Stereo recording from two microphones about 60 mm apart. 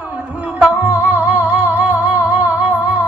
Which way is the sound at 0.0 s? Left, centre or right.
Right.